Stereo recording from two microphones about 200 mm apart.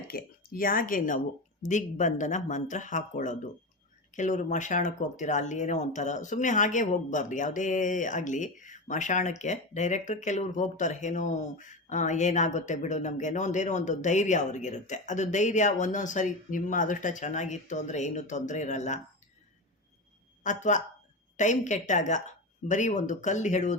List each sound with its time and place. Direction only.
0.1 s speech: 45° left (ahead or behind)
20.4 s speech: 40° left (ahead or behind)